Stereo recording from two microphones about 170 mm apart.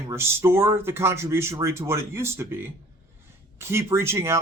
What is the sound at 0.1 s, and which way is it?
Speech, 15° right (ahead or behind).